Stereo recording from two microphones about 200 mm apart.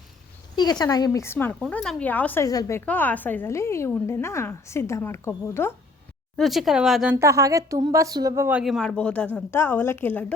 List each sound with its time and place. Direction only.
0.5 s a woman's voice: 20° left (ahead or behind)
6.3 s a woman's voice: centre (ahead or behind)
7.2 s a woman's voice: 15° right (ahead or behind); by 10.3 s 10° left (ahead or behind)